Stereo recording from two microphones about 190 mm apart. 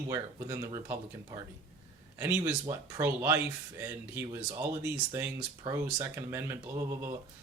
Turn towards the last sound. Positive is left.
turn(degrees=-20)  # may be behind; listen again after turning